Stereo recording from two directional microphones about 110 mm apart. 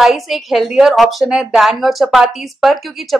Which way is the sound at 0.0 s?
Centre (ahead or behind).